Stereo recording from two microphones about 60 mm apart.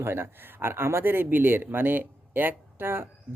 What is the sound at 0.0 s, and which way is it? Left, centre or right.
Speech, right.